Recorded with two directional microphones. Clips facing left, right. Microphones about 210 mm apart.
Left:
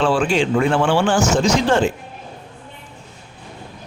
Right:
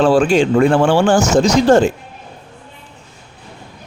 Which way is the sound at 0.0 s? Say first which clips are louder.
Right 5 dB; 40° right (ahead or behind).